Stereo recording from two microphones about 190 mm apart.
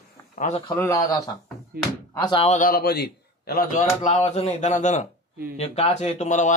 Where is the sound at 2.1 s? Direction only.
25° left (ahead or behind).